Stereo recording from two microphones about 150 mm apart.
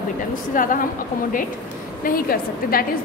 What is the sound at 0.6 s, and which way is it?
Speech, 65° left (ahead or behind).